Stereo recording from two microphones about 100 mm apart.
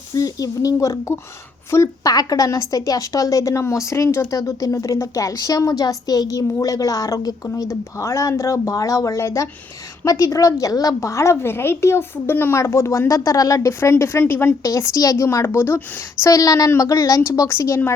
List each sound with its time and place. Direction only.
0.1 s a woman's voice: 40° left (ahead or behind)
16.2 s a woman's voice: 35° left (ahead or behind)